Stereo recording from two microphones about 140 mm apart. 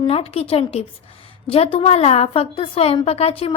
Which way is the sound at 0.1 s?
45° left (ahead or behind).